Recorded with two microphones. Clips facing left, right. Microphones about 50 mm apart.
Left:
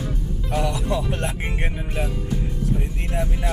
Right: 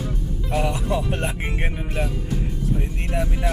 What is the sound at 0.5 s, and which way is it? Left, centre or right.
Music, right.